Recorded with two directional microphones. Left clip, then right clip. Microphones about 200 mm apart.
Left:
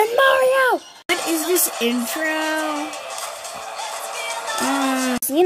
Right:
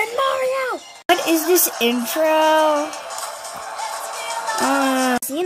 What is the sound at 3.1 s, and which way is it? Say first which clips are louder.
Music: right 1 dB; 20° left (ahead or behind).